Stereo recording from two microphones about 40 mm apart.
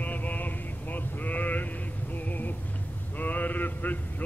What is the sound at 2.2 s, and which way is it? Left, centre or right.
Vehicle, left.